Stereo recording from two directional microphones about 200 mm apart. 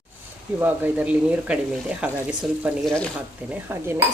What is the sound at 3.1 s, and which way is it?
Dishes, 10° right (ahead or behind).